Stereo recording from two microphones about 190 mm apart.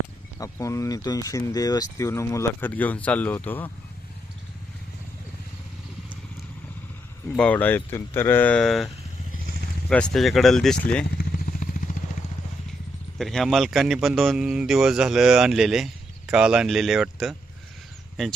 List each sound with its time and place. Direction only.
0.3 s speech: 15° left (ahead or behind)
7.3 s speech: 5° left (ahead or behind)
9.9 s a man's voice: 5° left (ahead or behind)
11.6 s vehicle: 45° left (ahead or behind)
13.1 s a man's voice: centre (ahead or behind)